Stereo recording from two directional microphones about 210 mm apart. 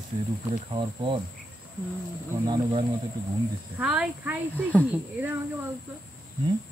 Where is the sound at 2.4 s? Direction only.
20° right (ahead or behind).